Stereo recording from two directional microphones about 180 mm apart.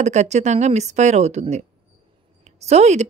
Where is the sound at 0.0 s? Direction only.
40° right (ahead or behind).